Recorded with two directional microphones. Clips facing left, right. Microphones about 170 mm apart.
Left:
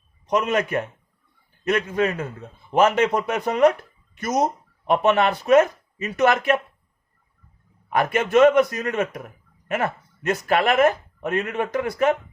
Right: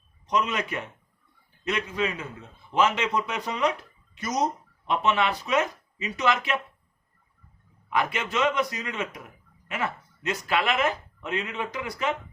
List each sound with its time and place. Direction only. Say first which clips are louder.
0.3 s speech: left 6 dB; 50° left (ahead or behind)
7.9 s speech: left 6 dB; 50° left (ahead or behind)